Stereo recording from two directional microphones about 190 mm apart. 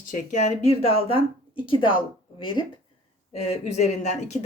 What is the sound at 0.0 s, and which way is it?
Speech, 40° left (ahead or behind).